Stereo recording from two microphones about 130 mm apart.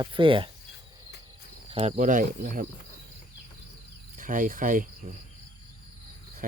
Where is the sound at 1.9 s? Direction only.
85° right.